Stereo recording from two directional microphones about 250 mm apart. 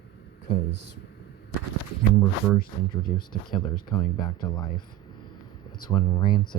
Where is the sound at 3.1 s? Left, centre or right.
Centre.